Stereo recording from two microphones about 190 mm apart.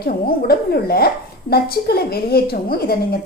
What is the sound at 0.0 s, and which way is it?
A woman's voice, 55° left (ahead or behind).